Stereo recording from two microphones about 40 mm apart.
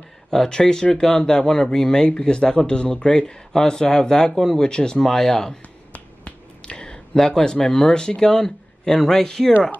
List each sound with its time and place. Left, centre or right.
0.3 s speech: centre
5.0 s speech: centre
5.9 s speech: left; by 9.5 s centre